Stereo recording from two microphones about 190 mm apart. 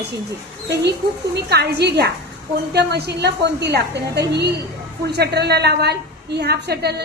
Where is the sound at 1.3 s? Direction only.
60° right (ahead or behind).